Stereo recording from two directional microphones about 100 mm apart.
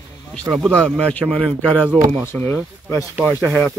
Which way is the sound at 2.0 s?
90° right.